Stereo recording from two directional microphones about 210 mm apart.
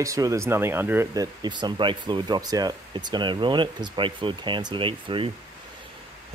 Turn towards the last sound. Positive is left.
turn(degrees=-25)  # may be behind; listen again after turning